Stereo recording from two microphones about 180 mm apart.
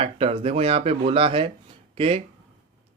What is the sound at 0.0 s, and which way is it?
Speech, 35° right (ahead or behind).